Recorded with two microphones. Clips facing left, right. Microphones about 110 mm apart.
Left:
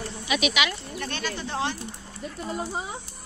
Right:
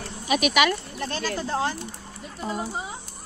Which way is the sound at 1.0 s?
35° right (ahead or behind).